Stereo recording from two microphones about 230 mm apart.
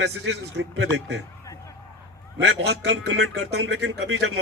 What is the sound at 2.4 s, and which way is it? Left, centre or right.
Speech, right.